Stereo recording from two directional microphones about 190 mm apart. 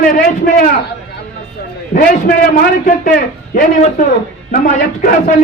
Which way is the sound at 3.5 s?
45° left (ahead or behind).